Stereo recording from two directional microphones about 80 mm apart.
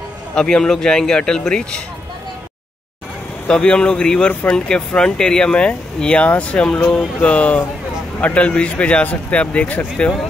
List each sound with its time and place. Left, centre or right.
0.3 s speech: centre
3.4 s speech: centre
4.6 s speech: centre